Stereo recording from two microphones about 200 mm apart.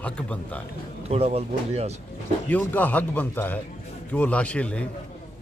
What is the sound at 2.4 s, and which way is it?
A man's voice, 10° left (ahead or behind).